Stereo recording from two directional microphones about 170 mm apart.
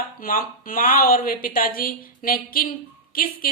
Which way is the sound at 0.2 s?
55° left (ahead or behind).